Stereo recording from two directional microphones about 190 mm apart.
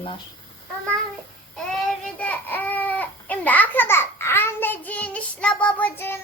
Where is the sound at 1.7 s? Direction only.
Centre (ahead or behind).